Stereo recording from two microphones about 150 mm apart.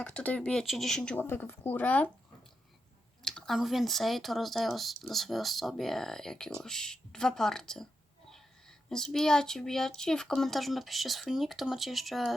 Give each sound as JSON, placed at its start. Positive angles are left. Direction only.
{"t": 0.0, "sound": "speech", "side_deg": 10}
{"t": 3.2, "sound": "speech", "side_deg": 5}